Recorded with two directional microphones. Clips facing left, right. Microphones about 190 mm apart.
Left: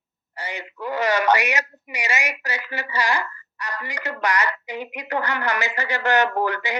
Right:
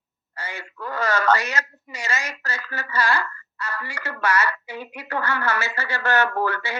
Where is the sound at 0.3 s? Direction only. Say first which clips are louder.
Left 3 dB; 15° left (ahead or behind).